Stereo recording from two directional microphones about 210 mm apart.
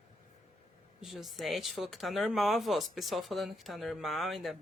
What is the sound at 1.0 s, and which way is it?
Speech, centre (ahead or behind).